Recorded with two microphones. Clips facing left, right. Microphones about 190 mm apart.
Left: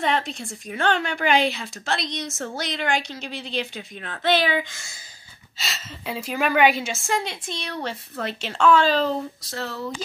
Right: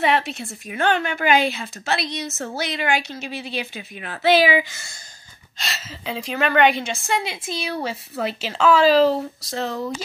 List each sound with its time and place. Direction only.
0.0 s a woman's voice: 5° right (ahead or behind)
9.5 s speech: 15° right (ahead or behind)